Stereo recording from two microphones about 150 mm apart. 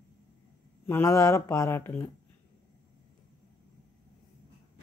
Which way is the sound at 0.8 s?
20° left (ahead or behind).